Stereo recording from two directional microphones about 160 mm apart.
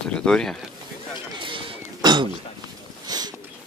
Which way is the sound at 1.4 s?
30° right (ahead or behind).